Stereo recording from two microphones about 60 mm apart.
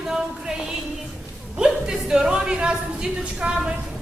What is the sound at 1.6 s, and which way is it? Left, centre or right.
Speech, centre.